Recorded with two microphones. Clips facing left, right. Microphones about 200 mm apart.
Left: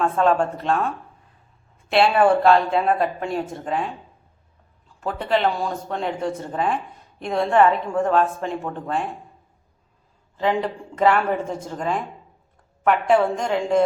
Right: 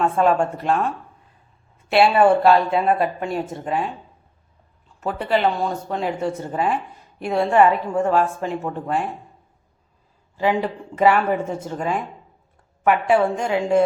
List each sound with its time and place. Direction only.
0.0 s a woman's voice: 10° right (ahead or behind)
4.9 s a woman's voice: 5° right (ahead or behind)
10.3 s a woman's voice: 5° right (ahead or behind)